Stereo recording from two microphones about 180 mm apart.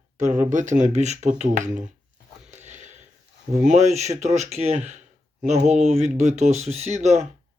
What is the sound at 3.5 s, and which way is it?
Speech, 40° right (ahead or behind).